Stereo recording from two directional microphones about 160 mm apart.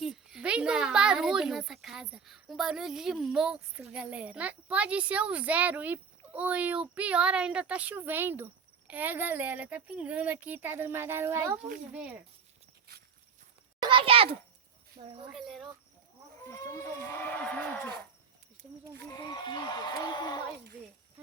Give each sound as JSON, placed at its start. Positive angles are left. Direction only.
{"t": 0.0, "sound": "a child's voice", "side_deg": 0}
{"t": 13.8, "sound": "a child's voice", "side_deg": -35}
{"t": 15.0, "sound": "speech", "side_deg": -55}
{"t": 15.3, "sound": "speech", "side_deg": 0}
{"t": 17.0, "sound": "speech", "side_deg": 10}
{"t": 19.3, "sound": "a sound", "side_deg": 30}